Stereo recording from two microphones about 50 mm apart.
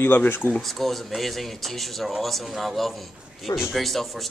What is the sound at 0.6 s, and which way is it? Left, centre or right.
A man's voice, centre.